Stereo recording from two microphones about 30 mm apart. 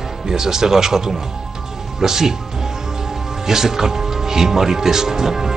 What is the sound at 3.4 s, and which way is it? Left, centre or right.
Speech, centre.